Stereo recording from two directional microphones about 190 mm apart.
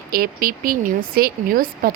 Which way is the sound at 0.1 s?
50° right (ahead or behind).